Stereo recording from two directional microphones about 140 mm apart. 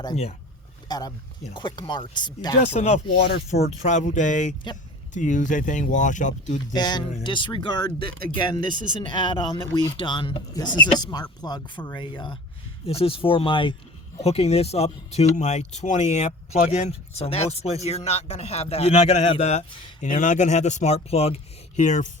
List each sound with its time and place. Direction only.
0.9 s speech: 30° left (ahead or behind)
2.7 s speech: 50° left (ahead or behind)
6.7 s speech: 30° left (ahead or behind)
8.7 s speech: 70° right (ahead or behind)
9.0 s speech: 35° left (ahead or behind)
14.2 s speech: 50° left (ahead or behind)